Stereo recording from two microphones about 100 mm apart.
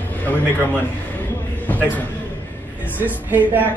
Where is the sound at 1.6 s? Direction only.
15° left (ahead or behind).